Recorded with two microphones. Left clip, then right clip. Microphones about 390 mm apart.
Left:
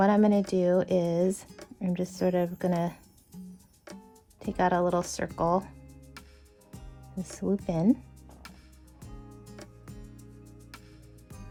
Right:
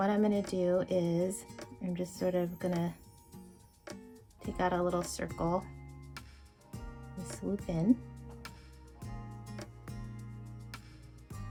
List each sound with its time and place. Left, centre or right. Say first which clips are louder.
0.0 s speech: left 7 dB; left
3.9 s music: even; centre
4.4 s speech: left 6 dB; left
6.2 s music: even; centre
7.3 s speech: left 7 dB; left
9.4 s music: even; centre